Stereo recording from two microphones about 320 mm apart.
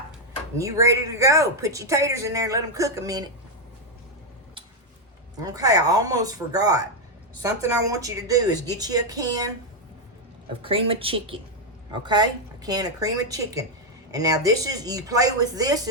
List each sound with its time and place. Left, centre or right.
0.5 s speech: centre
5.4 s speech: centre
10.6 s a woman's voice: centre